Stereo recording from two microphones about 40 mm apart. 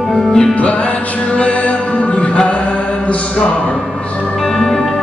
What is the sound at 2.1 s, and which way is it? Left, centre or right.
Music, left.